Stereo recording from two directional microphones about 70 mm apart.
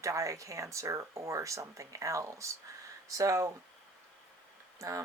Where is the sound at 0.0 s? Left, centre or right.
Right.